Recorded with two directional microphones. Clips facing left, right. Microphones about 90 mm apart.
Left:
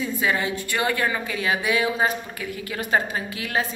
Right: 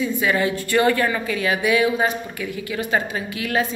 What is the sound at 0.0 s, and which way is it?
A woman's voice, 25° left (ahead or behind).